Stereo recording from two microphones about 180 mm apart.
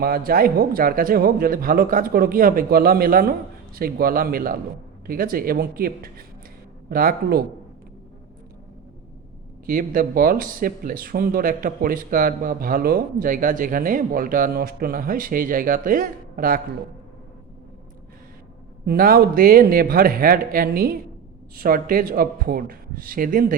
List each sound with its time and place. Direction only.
0.0 s speech: 55° right (ahead or behind)
9.6 s speech: 50° right (ahead or behind)
18.9 s speech: 55° right (ahead or behind)